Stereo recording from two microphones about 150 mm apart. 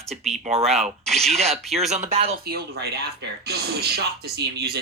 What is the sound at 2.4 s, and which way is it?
Speech, 90° right.